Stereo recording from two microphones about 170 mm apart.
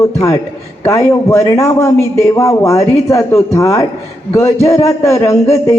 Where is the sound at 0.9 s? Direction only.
15° left (ahead or behind).